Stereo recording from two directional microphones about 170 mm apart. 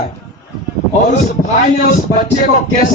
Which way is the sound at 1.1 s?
45° left (ahead or behind).